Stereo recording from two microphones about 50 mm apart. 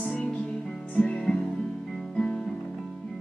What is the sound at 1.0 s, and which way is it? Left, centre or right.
Music, centre.